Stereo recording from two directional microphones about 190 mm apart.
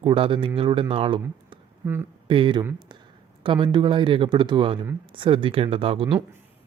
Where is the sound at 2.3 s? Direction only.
25° right (ahead or behind).